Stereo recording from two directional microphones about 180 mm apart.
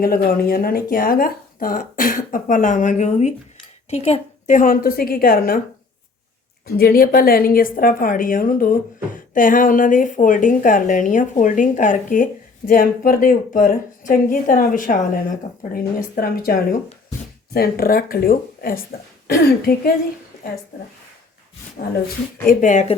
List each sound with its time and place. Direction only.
0.0 s speech: 55° left (ahead or behind)
6.7 s speech: 55° left (ahead or behind)
22.4 s speech: 45° left (ahead or behind)